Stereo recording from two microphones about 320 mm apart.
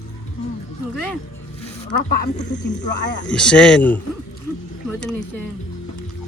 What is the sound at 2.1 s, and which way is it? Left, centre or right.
Speech, left.